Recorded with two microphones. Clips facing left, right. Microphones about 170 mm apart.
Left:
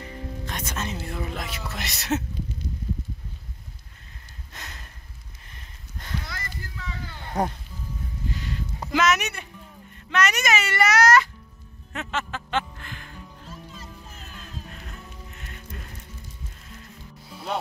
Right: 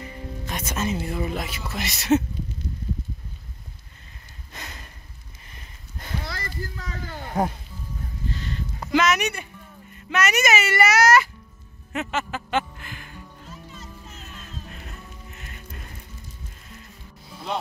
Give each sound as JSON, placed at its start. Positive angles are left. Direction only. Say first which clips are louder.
{"t": 0.5, "sound": "speech", "louder": "right 6 dB", "side_deg": -5}
{"t": 4.5, "sound": "a sound", "louder": "right 3 dB", "side_deg": 0}
{"t": 6.2, "sound": "rowboat", "louder": "right 5 dB", "side_deg": -35}
{"t": 8.3, "sound": "a sound", "louder": "right 1 dB", "side_deg": 10}
{"t": 9.9, "sound": "music", "louder": "right 1 dB", "side_deg": -5}
{"t": 14.9, "sound": "music", "louder": "even", "side_deg": -5}